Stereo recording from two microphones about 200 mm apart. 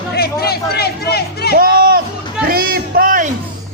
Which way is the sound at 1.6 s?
45° right (ahead or behind).